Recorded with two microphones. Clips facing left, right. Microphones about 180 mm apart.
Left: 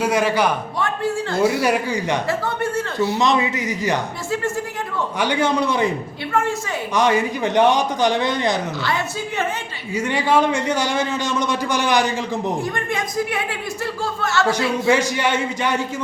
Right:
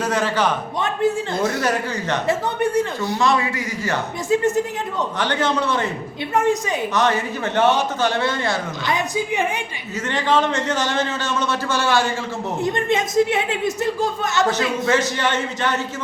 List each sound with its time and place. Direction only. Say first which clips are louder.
0.0 s a man's voice: left 2 dB; 10° left (ahead or behind)
0.8 s speech: right 4 dB; 20° right (ahead or behind)
1.4 s a man's voice: left 3 dB; 10° left (ahead or behind)
2.2 s speech: right 2 dB; 15° right (ahead or behind)
3.2 s a man's voice: right 2 dB; 20° left (ahead or behind)
4.3 s speech: right 6 dB; 20° right (ahead or behind)
5.2 s a man's voice: left 3 dB; 10° left (ahead or behind)
6.3 s speech: right 3 dB; 20° right (ahead or behind)
6.9 s a man's voice: left 4 dB; 15° left (ahead or behind)
8.8 s speech: right 1 dB; 15° right (ahead or behind)
9.9 s a man's voice: left 2 dB; 10° left (ahead or behind)
12.6 s speech: right 4 dB; 20° right (ahead or behind)
14.8 s a man's voice: left 3 dB; 10° left (ahead or behind)